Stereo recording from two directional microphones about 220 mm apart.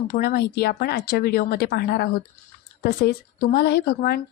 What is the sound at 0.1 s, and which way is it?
Speech, 45° left (ahead or behind).